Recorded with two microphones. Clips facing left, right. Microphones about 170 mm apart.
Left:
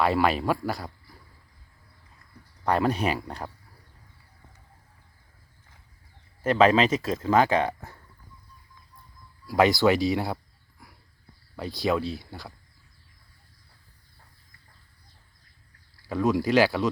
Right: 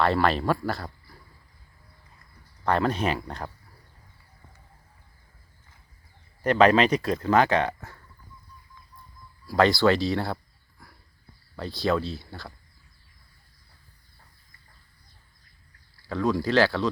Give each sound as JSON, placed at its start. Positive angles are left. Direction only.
{"t": 0.0, "sound": "speech", "side_deg": 10}
{"t": 2.6, "sound": "speech", "side_deg": 10}
{"t": 6.4, "sound": "speech", "side_deg": 5}
{"t": 9.5, "sound": "speech", "side_deg": 15}
{"t": 11.8, "sound": "speech", "side_deg": 10}
{"t": 16.0, "sound": "speech", "side_deg": 15}